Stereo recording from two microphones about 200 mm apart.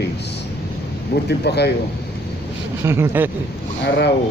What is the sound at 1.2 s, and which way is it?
Speech, 55° left (ahead or behind).